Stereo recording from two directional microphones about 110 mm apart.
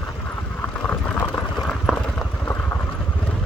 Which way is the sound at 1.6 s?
5° left (ahead or behind).